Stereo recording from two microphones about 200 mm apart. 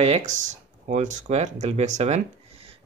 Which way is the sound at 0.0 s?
35° right (ahead or behind).